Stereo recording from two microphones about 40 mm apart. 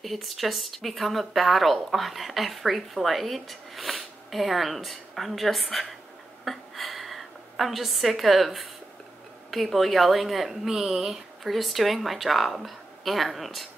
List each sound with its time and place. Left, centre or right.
0.0 s speech: centre
6.4 s a sound: centre
9.5 s speech: centre